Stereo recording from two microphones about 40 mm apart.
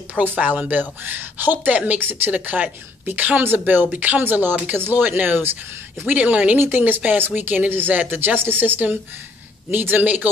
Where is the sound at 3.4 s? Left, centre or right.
Right.